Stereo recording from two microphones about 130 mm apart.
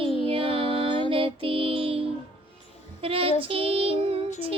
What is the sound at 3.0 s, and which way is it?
Child singing, 45° right (ahead or behind).